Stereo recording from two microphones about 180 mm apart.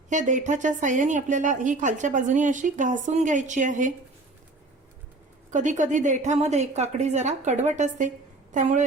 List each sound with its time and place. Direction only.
0.1 s a woman's voice: 45° right (ahead or behind)
5.5 s a woman's voice: 45° right (ahead or behind)